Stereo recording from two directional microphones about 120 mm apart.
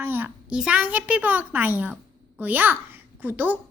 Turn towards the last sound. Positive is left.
turn(degrees=-15)  # may be behind; listen again after turning